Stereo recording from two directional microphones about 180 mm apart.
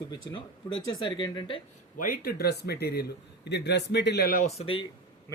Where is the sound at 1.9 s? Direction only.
50° left (ahead or behind).